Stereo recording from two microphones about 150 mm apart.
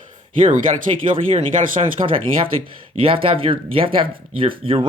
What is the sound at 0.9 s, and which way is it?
Speech, 40° right (ahead or behind).